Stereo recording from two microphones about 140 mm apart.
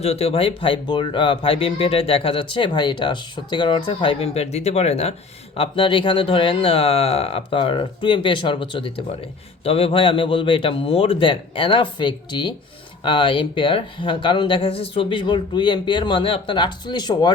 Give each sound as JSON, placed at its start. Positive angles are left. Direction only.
{"t": 0.0, "sound": "speech", "side_deg": 45}
{"t": 5.5, "sound": "speech", "side_deg": 40}